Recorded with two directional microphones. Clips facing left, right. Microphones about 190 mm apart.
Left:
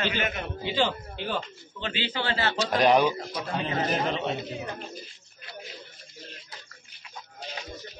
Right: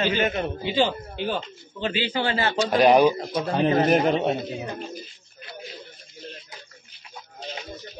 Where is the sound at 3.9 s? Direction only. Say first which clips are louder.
Right 8 dB; 50° right (ahead or behind).